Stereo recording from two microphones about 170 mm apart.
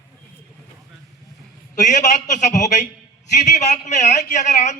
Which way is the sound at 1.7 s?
45° left (ahead or behind).